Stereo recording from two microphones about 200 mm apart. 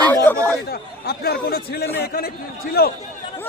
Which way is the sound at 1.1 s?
50° left (ahead or behind).